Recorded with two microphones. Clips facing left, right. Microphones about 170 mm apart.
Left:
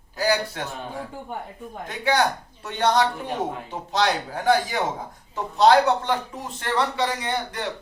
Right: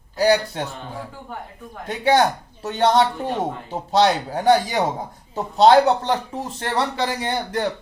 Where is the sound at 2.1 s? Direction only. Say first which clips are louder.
Right 5 dB; 35° right (ahead or behind).